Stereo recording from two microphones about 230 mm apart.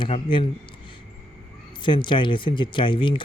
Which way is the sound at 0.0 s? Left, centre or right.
Left.